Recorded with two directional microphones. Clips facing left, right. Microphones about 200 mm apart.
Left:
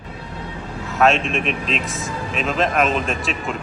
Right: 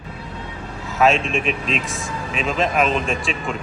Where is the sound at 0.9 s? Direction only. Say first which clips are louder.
Even; centre (ahead or behind).